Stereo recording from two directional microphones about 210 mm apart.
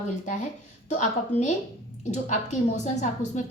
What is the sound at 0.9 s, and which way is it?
A woman's voice, 30° left (ahead or behind).